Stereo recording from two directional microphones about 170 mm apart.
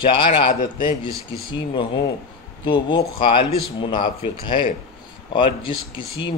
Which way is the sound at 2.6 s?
25° left (ahead or behind).